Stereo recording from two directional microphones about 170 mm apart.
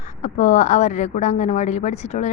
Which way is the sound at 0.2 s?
45° left (ahead or behind).